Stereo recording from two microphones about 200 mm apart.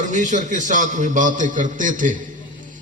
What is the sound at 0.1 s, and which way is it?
A man's voice, 40° right (ahead or behind).